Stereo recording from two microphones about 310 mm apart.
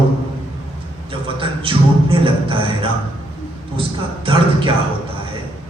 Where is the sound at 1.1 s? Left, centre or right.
Centre.